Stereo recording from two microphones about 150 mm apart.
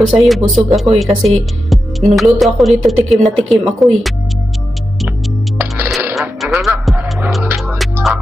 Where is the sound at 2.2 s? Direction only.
Centre (ahead or behind).